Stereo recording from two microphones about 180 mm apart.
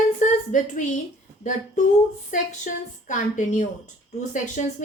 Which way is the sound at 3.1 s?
45° left (ahead or behind).